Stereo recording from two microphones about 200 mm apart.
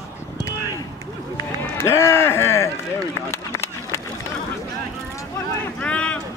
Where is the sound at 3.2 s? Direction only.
15° left (ahead or behind).